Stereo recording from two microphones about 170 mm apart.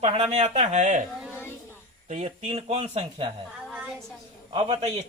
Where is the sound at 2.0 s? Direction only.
45° right (ahead or behind).